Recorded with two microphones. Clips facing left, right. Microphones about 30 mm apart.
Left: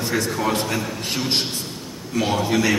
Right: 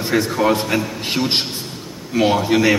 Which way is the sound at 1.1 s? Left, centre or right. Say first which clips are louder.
Right 3 dB; right.